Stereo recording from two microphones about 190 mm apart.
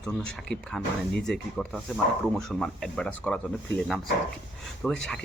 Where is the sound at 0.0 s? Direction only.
5° left (ahead or behind).